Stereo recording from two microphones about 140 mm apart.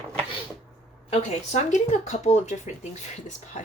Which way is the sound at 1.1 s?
55° left (ahead or behind).